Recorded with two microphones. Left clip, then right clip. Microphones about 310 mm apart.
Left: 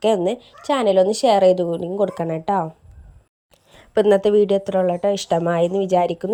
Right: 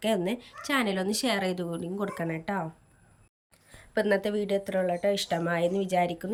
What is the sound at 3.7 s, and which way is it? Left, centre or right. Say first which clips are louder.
Speech: left 11 dB; left.